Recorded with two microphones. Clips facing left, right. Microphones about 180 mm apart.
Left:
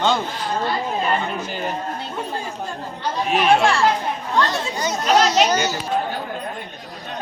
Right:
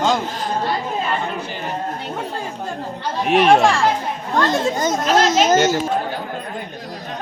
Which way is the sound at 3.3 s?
55° right (ahead or behind).